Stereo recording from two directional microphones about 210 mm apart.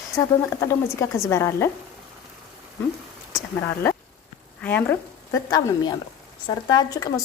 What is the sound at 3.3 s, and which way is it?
A woman's voice, 10° left (ahead or behind).